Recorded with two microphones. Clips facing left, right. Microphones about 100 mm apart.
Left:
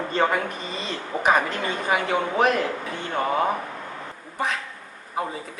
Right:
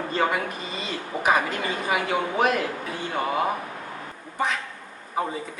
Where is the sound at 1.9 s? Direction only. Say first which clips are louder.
Left 2 dB; 40° left (ahead or behind).